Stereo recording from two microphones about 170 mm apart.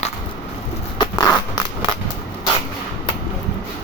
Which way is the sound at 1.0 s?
25° left (ahead or behind).